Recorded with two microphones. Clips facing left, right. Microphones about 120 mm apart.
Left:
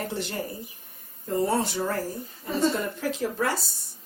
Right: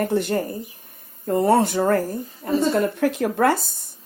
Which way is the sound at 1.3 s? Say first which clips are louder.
Right 7 dB; 60° right (ahead or behind).